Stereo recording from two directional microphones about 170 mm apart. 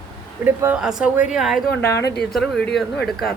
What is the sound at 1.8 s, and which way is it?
Speech, 15° left (ahead or behind).